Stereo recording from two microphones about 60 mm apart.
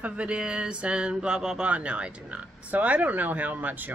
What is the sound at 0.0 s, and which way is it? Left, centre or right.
Speech, centre.